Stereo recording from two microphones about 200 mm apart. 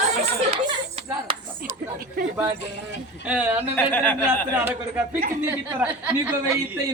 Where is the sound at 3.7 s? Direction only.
10° left (ahead or behind).